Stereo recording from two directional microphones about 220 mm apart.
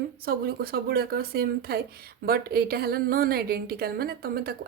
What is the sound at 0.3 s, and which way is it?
A woman's voice, 40° right (ahead or behind).